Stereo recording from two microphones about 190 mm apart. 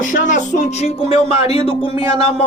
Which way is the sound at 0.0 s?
40° left (ahead or behind).